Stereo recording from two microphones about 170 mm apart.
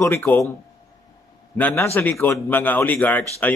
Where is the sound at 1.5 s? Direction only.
10° left (ahead or behind).